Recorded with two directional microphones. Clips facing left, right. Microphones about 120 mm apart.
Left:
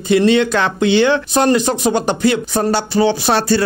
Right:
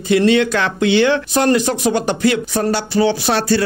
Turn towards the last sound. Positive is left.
turn(degrees=30)  # may be behind; listen again after turning